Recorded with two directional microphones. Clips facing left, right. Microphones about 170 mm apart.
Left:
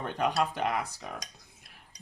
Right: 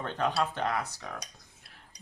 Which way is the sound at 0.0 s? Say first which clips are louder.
Left 1 dB; 15° left (ahead or behind).